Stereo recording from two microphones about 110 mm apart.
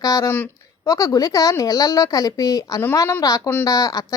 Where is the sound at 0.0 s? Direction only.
30° left (ahead or behind).